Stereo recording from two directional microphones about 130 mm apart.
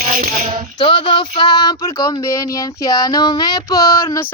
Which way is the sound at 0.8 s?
35° left (ahead or behind).